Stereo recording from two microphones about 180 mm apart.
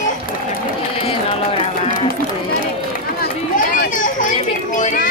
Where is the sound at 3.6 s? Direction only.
50° left (ahead or behind).